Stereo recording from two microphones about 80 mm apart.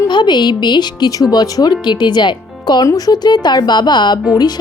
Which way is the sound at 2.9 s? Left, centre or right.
Left.